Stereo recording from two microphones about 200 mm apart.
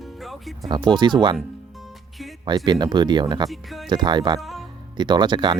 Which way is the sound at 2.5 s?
20° right (ahead or behind).